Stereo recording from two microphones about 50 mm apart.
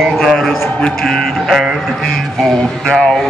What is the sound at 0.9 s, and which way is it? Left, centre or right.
Music, centre.